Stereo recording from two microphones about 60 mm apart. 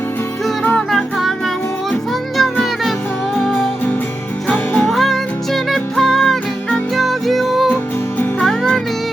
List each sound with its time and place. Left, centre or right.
0.6 s music: left
0.9 s music: centre
2.4 s music: centre
4.9 s music: centre